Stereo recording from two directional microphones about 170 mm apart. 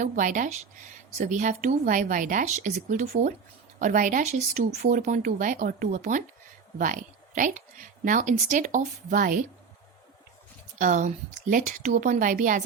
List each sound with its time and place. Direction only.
0.0 s a woman's voice: 50° right (ahead or behind)
10.8 s speech: 50° right (ahead or behind)